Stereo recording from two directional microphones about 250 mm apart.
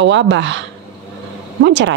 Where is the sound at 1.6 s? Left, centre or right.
Right.